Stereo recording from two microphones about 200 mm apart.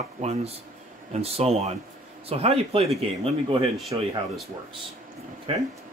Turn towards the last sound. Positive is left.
turn(degrees=-30)  # may be behind; listen again after turning